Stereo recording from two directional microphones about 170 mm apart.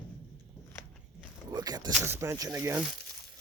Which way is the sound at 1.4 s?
25° right (ahead or behind).